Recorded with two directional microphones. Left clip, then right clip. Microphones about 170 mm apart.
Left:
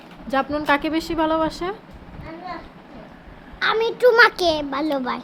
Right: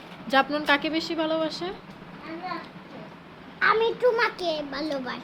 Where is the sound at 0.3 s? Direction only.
20° left (ahead or behind); by 1.7 s 45° left (ahead or behind).